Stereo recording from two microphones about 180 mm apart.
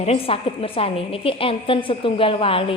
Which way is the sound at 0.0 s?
35° left (ahead or behind).